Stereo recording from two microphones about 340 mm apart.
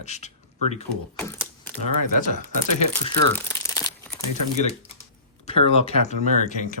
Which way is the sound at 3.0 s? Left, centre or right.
Centre.